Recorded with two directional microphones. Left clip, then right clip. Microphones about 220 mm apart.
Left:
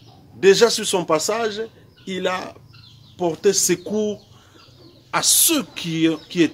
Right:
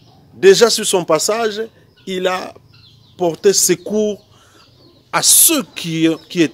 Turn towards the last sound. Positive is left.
turn(degrees=-25)  # may be behind; listen again after turning